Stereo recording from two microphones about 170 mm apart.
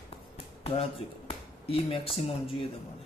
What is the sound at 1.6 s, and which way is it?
Speech, 35° left (ahead or behind).